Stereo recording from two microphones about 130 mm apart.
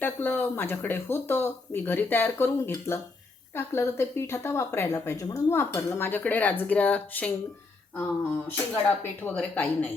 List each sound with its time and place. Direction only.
0.0 s speech: 15° left (ahead or behind)